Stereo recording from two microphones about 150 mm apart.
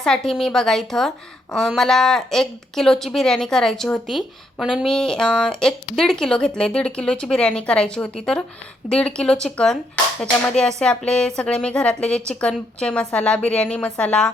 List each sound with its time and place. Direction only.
0.0 s a woman's voice: 5° left (ahead or behind)